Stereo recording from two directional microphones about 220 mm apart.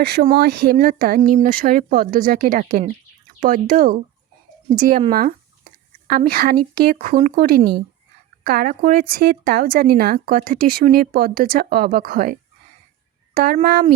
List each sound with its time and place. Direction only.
0.0 s speech: 45° right (ahead or behind)
6.1 s speech: 40° right (ahead or behind)